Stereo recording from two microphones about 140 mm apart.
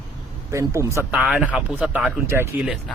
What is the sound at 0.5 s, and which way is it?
Speech, 20° right (ahead or behind).